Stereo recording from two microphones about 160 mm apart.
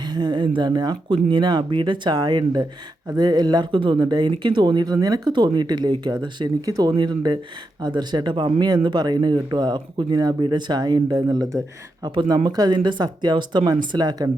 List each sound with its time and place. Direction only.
0.0 s speech: 25° right (ahead or behind)